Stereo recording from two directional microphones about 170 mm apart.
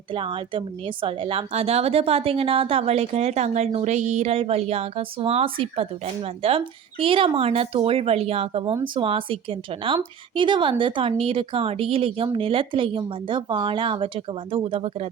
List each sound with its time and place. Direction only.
0.1 s speech: 30° right (ahead or behind)